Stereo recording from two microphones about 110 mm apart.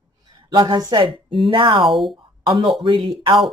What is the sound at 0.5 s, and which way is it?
Speech, 45° right (ahead or behind).